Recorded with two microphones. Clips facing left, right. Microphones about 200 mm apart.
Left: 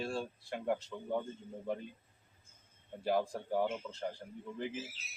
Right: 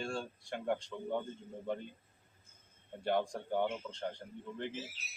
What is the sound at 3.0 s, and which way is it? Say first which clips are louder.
A man's voice: left 1 dB; 5° left (ahead or behind).